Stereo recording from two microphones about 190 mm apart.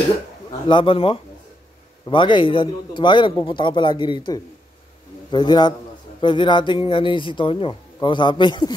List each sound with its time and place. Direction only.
0.5 s a man's voice: 25° left (ahead or behind)